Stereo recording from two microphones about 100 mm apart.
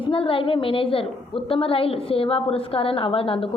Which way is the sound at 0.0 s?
65° left (ahead or behind).